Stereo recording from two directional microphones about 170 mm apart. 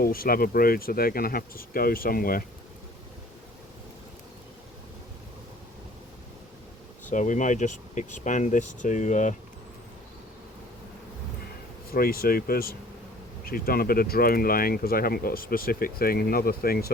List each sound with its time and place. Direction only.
0.0 s speech: 60° left (ahead or behind)
7.1 s speech: 50° left (ahead or behind)
11.9 s speech: 60° left (ahead or behind)